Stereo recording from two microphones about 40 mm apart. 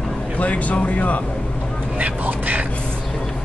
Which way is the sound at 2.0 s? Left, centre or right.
Right.